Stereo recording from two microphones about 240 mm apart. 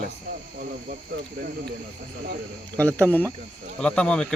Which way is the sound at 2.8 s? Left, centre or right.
Centre.